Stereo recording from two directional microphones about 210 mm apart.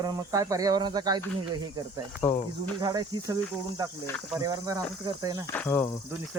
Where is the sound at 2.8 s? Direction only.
20° right (ahead or behind).